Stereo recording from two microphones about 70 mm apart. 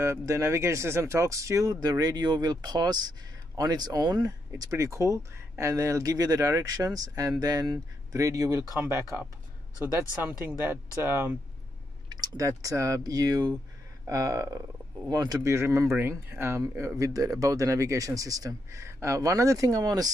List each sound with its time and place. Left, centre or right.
0.0 s speech: right
1.8 s speech: right
4.6 s speech: right
8.2 s speech: right
8.8 s speech: right
11.0 s speech: right
12.1 s speech: right
15.0 s speech: right
15.4 s speech: right